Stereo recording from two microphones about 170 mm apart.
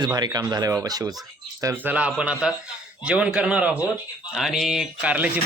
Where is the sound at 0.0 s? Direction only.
20° right (ahead or behind).